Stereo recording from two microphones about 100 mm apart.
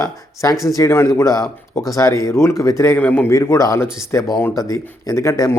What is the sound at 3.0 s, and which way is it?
Speech, 15° left (ahead or behind).